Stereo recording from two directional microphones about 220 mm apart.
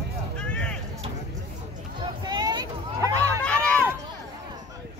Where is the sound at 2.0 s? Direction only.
20° right (ahead or behind).